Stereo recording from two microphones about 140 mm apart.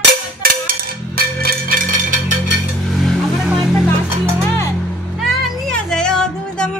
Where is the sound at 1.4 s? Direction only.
90° right.